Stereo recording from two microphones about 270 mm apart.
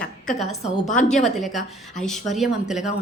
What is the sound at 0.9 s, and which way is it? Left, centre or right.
Speech, left.